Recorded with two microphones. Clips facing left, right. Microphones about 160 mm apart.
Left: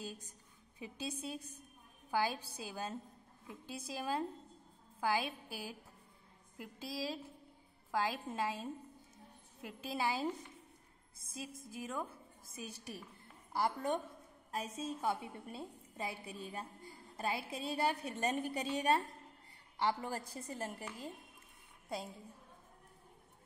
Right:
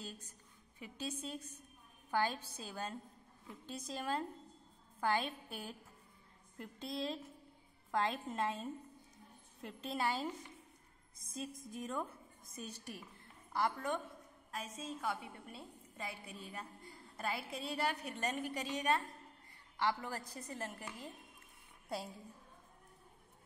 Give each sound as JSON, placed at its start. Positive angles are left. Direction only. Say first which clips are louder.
{"t": 0.0, "sound": "a woman's voice", "louder": "left 3 dB", "side_deg": 15}
{"t": 11.3, "sound": "a woman's voice", "louder": "right 2 dB", "side_deg": 5}
{"t": 13.5, "sound": "a sound", "louder": "left 1 dB", "side_deg": 10}
{"t": 14.5, "sound": "a woman's voice", "louder": "left 4 dB", "side_deg": 30}
{"t": 21.8, "sound": "a woman's voice", "louder": "even", "side_deg": 0}